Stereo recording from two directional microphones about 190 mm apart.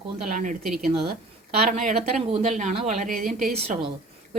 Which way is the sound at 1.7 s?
35° right (ahead or behind).